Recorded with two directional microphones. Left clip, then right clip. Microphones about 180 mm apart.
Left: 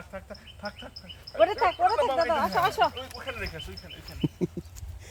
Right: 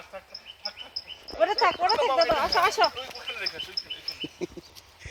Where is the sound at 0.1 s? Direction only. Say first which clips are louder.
Left 1 dB; centre (ahead or behind).